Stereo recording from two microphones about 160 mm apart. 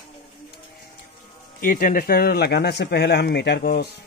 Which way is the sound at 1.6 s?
60° left (ahead or behind).